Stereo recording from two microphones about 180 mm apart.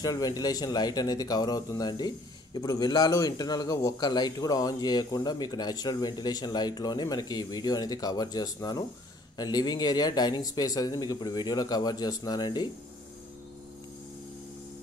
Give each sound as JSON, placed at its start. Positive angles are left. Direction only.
{"t": 0.0, "sound": "speech", "side_deg": 20}